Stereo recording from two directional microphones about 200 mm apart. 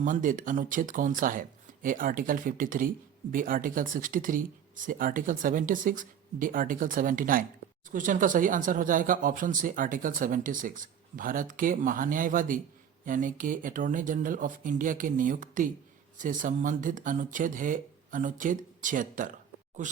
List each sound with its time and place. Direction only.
0.0 s speech: 40° right (ahead or behind)